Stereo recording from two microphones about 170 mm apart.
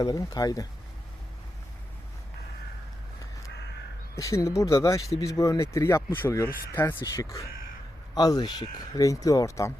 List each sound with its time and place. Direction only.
0.0 s speech: 20° left (ahead or behind)
4.2 s speech: 20° left (ahead or behind)